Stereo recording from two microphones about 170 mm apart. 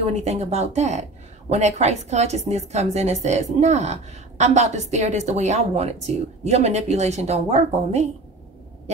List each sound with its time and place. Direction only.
0.0 s a woman's voice: 40° right (ahead or behind)